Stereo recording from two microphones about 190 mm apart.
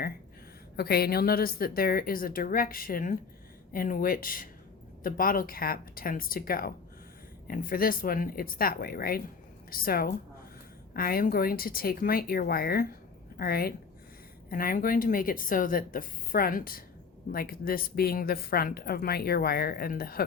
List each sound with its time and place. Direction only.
0.8 s a woman's voice: 55° left (ahead or behind)